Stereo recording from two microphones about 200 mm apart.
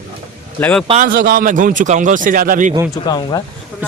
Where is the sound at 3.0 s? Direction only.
20° left (ahead or behind).